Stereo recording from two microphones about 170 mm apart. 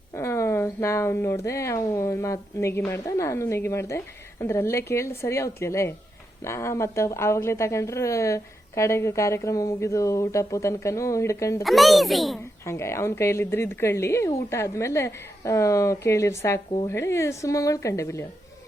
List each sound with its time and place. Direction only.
0.1 s speech: 15° left (ahead or behind)
11.6 s a child's voice: centre (ahead or behind)
12.6 s speech: 15° left (ahead or behind)